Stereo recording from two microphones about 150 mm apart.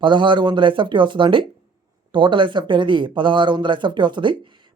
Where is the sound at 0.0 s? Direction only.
30° right (ahead or behind).